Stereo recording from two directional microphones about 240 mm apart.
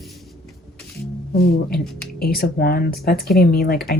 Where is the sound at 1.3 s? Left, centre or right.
Left.